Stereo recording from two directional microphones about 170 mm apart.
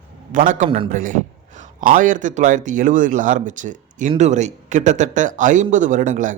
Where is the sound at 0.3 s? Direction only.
50° right (ahead or behind).